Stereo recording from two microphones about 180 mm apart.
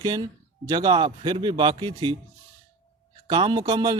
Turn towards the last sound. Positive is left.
turn(degrees=-20)  # may be behind; listen again after turning